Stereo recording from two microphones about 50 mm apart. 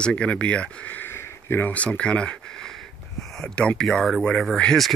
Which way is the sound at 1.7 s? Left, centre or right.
Left.